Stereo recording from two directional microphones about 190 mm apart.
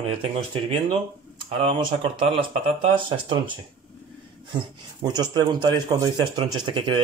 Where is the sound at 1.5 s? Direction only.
30° right (ahead or behind).